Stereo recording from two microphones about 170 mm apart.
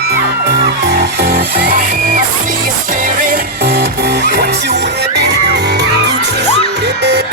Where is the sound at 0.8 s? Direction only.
75° right (ahead or behind).